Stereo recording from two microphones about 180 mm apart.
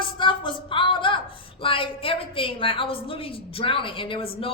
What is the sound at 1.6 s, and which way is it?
A woman's voice, 30° left (ahead or behind).